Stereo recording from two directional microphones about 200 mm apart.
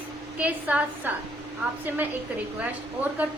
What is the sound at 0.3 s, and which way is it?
Speech, 5° right (ahead or behind).